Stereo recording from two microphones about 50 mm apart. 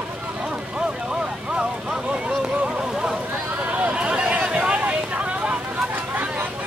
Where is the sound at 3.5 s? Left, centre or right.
Right.